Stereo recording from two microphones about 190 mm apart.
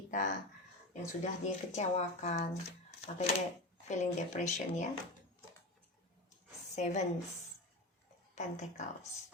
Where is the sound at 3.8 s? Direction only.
40° left (ahead or behind).